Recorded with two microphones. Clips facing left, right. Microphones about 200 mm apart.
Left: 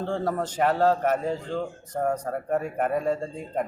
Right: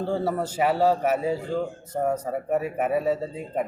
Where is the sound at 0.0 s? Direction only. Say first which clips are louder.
Right 2 dB; 10° right (ahead or behind).